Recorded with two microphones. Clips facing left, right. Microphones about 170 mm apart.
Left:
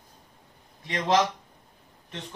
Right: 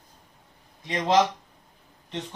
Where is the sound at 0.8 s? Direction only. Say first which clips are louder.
Right 1 dB; 20° right (ahead or behind).